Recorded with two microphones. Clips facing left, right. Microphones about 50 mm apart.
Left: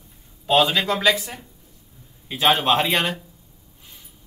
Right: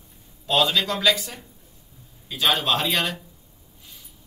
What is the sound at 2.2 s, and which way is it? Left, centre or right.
Speech, left.